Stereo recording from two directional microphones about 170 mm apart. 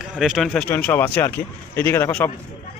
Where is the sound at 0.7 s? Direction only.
10° left (ahead or behind).